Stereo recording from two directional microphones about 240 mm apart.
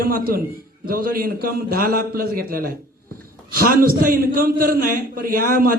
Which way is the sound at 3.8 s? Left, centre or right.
Right.